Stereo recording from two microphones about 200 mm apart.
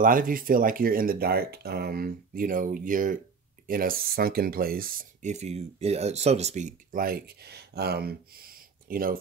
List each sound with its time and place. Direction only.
0.0 s speech: 45° right (ahead or behind)